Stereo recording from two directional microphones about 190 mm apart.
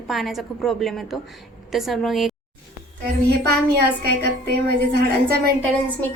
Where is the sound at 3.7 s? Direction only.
60° right (ahead or behind).